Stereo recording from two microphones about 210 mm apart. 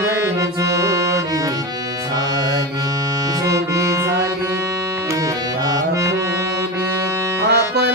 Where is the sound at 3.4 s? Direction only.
15° right (ahead or behind).